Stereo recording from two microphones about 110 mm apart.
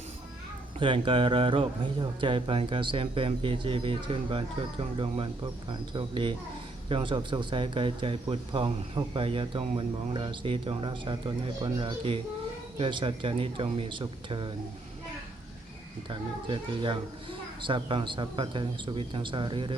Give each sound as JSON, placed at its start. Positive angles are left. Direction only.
{"t": 0.8, "sound": "speech", "side_deg": -45}
{"t": 16.0, "sound": "speech", "side_deg": -50}